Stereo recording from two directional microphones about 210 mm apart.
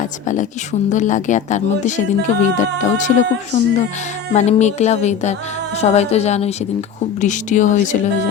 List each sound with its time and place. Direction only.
0.0 s speech: 35° left (ahead or behind)